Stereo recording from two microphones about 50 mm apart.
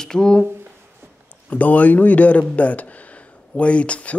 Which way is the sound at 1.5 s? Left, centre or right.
Left.